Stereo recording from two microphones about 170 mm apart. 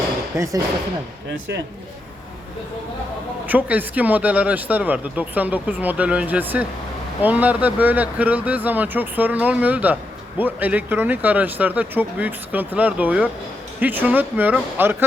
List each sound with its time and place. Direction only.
0.3 s speech: 20° right (ahead or behind)
3.4 s speech: 10° right (ahead or behind)